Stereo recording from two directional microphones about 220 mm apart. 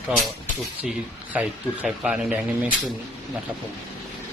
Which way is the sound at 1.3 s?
5° right (ahead or behind).